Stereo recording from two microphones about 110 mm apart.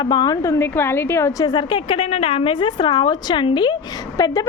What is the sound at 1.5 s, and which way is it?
A woman's voice, 45° left (ahead or behind).